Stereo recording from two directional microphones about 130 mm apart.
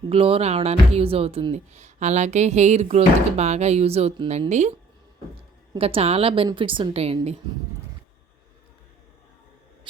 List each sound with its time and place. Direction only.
0.1 s speech: 50° right (ahead or behind)
5.7 s a woman's voice: 50° right (ahead or behind)